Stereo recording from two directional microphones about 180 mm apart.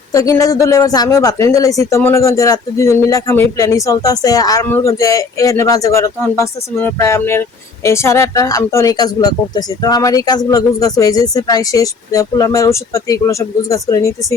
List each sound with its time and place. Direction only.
0.1 s speech: 15° left (ahead or behind)